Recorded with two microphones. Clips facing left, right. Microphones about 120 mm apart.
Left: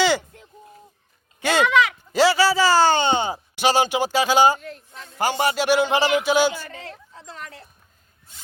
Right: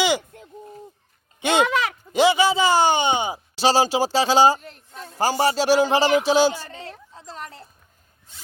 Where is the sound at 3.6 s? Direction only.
35° right (ahead or behind).